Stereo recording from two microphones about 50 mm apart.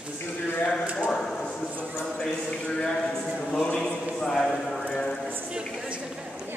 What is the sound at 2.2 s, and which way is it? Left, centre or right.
Horse, centre.